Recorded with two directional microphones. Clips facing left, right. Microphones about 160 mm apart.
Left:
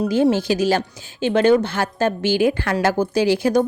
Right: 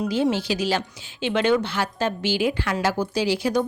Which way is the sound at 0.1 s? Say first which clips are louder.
Left 6 dB; 45° left (ahead or behind).